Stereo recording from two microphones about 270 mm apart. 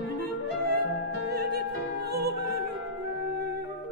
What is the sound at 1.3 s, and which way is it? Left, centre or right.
Opera, right.